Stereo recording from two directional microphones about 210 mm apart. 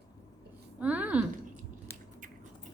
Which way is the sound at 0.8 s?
5° right (ahead or behind).